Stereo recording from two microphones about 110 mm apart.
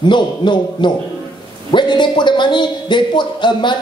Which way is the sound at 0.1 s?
45° left (ahead or behind).